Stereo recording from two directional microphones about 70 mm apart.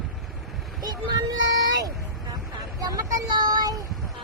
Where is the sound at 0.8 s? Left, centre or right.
Right.